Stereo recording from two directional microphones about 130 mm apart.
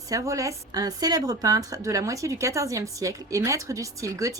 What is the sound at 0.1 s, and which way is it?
A woman's voice, 25° right (ahead or behind).